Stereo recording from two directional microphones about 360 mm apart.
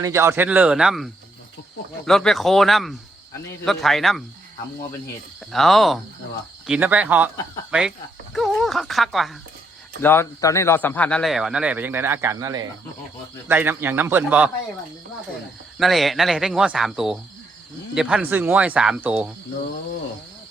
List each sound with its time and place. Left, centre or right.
0.0 s speech: centre
5.5 s speech: centre
15.8 s speech: centre